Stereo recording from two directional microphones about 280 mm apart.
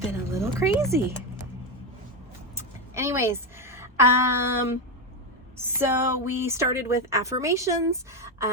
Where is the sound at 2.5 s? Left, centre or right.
Centre.